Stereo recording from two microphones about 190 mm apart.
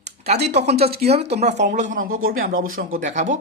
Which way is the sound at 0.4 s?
35° right (ahead or behind).